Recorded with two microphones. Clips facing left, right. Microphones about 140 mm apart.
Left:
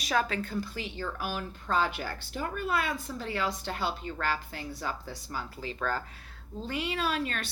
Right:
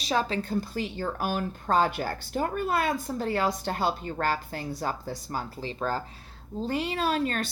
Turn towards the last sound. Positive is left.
turn(degrees=-40)  # may be behind; listen again after turning